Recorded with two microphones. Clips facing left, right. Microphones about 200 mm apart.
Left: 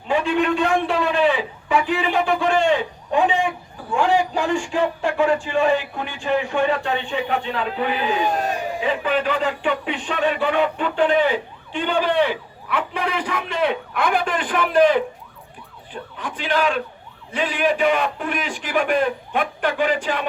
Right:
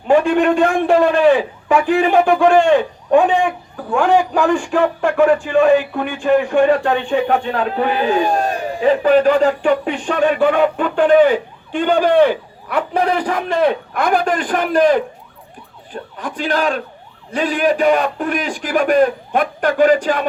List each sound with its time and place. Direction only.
0.1 s a man's voice: 50° right (ahead or behind)